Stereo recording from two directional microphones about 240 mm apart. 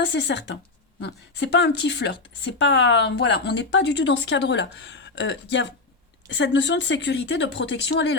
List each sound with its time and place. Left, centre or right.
0.0 s speech: left